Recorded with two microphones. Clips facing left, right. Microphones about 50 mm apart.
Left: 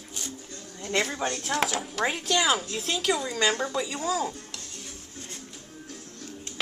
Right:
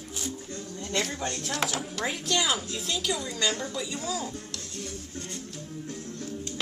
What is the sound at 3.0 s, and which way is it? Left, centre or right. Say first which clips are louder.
A woman's voice: left 5 dB; left.